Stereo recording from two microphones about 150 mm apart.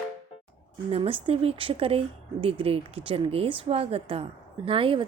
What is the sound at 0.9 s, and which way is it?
A woman's voice, 40° right (ahead or behind).